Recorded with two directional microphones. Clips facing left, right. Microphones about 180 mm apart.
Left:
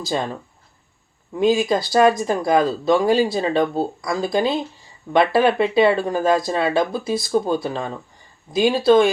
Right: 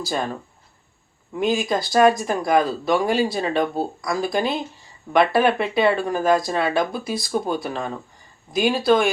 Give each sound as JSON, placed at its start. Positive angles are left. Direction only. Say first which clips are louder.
{"t": 0.0, "sound": "speech", "louder": "left 2 dB", "side_deg": 20}
{"t": 1.4, "sound": "speech", "louder": "left 4 dB", "side_deg": 25}